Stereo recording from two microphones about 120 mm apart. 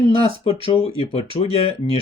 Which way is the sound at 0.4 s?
50° left (ahead or behind).